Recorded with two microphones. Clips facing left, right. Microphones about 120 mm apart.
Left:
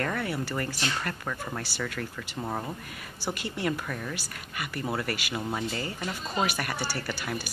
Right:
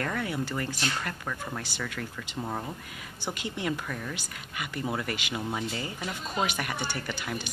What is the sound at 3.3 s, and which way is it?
Speech, 15° right (ahead or behind).